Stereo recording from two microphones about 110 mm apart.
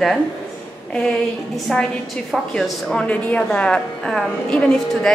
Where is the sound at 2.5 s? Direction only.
5° left (ahead or behind).